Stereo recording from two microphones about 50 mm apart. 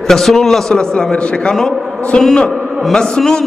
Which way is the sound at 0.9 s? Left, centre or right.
Left.